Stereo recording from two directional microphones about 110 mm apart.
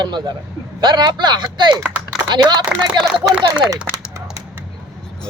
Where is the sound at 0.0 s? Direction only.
40° right (ahead or behind).